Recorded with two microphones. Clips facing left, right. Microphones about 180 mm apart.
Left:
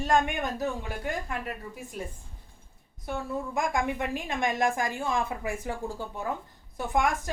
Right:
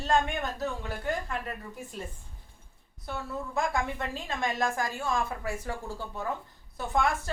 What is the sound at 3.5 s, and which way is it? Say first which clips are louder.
A woman's voice: left 1 dB; 15° left (ahead or behind).